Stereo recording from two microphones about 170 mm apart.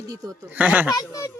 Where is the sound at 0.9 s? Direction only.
20° left (ahead or behind).